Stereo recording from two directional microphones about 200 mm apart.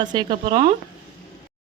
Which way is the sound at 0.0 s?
20° right (ahead or behind).